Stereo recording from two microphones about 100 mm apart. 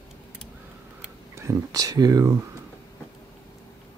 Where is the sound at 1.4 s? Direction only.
35° right (ahead or behind).